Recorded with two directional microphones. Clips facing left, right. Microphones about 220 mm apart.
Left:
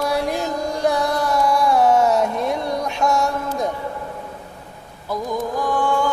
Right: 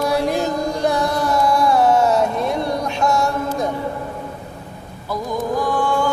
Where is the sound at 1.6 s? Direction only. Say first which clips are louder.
Even; 15° left (ahead or behind).